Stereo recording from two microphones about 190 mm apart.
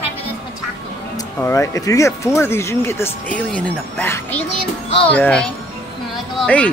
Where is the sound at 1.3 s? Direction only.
15° left (ahead or behind).